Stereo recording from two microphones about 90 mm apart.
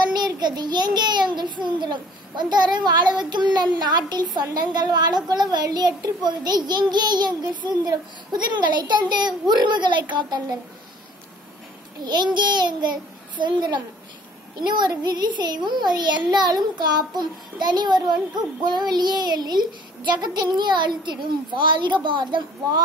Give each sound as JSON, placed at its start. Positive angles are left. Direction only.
{"t": 0.1, "sound": "a woman's voice", "side_deg": -50}
{"t": 12.0, "sound": "a child's voice", "side_deg": -55}